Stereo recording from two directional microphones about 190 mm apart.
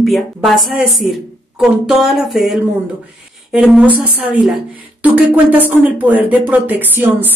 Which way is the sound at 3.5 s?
5° right (ahead or behind).